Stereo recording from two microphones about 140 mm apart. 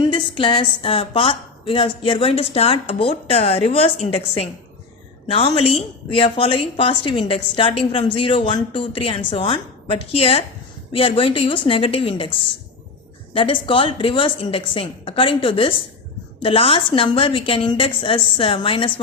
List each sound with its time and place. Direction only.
0.0 s a woman's voice: 35° left (ahead or behind)